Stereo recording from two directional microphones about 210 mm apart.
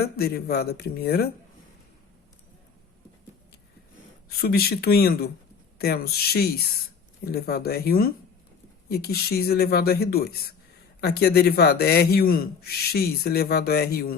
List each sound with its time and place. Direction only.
0.0 s speech: 50° left (ahead or behind)
4.3 s speech: 45° left (ahead or behind)